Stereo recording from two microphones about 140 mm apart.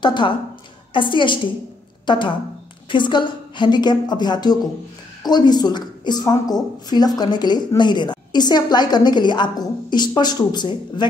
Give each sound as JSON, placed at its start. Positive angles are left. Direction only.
{"t": 0.0, "sound": "a woman's voice", "side_deg": 35}